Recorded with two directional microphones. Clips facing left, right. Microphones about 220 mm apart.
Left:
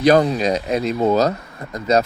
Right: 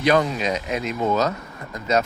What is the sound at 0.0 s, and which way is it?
Speech, 35° left (ahead or behind).